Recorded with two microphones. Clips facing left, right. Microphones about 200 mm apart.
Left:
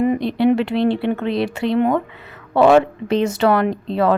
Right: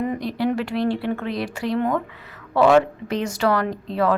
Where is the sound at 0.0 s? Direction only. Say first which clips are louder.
Left 7 dB; 20° left (ahead or behind).